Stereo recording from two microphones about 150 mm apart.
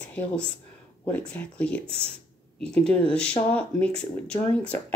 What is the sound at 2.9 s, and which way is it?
Speech, 10° left (ahead or behind).